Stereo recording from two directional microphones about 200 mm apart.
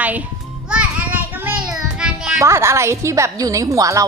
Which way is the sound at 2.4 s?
15° right (ahead or behind).